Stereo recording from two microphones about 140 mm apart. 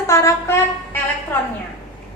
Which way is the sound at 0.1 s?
20° left (ahead or behind).